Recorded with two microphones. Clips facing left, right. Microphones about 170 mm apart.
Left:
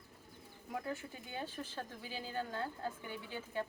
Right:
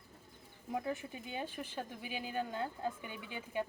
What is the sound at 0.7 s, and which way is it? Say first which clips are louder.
Speech: right 3 dB; 20° right (ahead or behind).